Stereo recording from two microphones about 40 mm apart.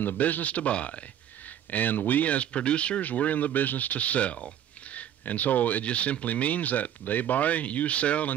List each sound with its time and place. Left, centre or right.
0.0 s speech: left
1.7 s speech: left
3.0 s speech: left
5.9 s speech: left